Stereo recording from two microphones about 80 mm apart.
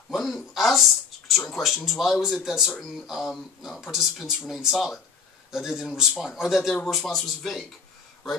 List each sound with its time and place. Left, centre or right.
0.1 s speech: centre